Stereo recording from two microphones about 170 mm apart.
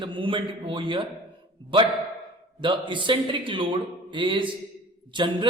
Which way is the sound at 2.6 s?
30° right (ahead or behind).